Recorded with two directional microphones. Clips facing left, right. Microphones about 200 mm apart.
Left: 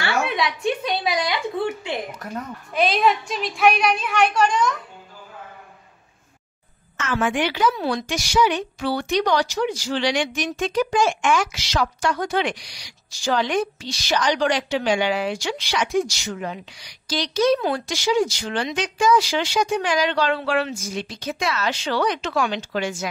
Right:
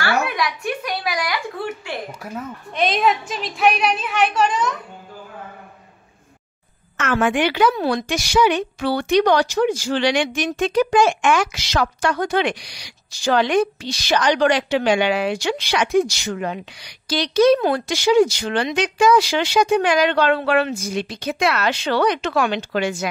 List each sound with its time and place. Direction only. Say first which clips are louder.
0.0 s a sound: right 1 dB; 25° left (ahead or behind)
2.3 s a woman's voice: left 3 dB; centre (ahead or behind)
7.0 s a woman's voice: right 4 dB; 65° right (ahead or behind)